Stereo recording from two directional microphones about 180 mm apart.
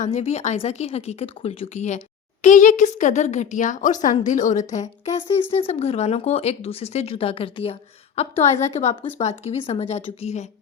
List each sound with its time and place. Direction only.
0.0 s a woman's voice: 35° left (ahead or behind)